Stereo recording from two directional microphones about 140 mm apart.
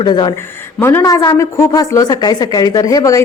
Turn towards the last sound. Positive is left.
turn(degrees=25)  # may be behind; listen again after turning